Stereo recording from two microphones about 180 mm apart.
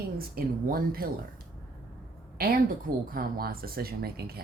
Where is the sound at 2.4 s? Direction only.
55° right (ahead or behind).